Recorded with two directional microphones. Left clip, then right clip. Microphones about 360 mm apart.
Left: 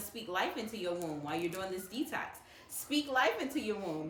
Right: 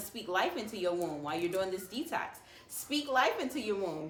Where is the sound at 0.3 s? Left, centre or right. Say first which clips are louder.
Right 3 dB; centre.